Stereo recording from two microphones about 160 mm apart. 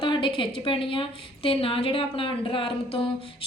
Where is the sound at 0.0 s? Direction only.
30° left (ahead or behind).